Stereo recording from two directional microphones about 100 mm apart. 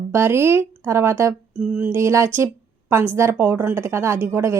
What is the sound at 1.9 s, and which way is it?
A woman's voice, 30° right (ahead or behind).